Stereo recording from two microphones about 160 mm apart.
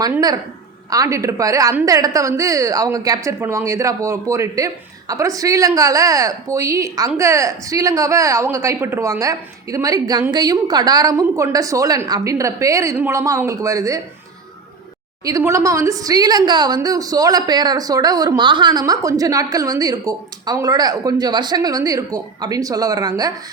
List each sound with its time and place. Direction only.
0.9 s a woman's voice: 20° right (ahead or behind)
15.2 s a woman's voice: 20° right (ahead or behind)